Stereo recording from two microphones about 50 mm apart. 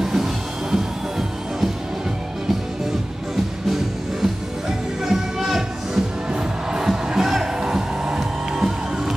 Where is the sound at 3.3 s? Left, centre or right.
Centre.